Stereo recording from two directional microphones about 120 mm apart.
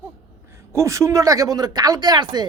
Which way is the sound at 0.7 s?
25° right (ahead or behind).